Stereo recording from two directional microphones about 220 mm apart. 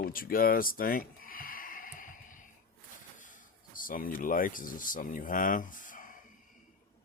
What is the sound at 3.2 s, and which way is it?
Speech, 35° left (ahead or behind).